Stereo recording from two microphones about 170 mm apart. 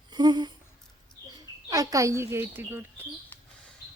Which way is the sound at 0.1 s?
25° right (ahead or behind).